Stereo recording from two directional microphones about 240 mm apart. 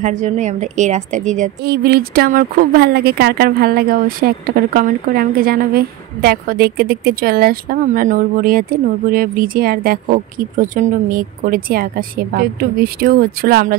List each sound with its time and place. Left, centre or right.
0.0 s a woman's voice: right
1.6 s a woman's voice: right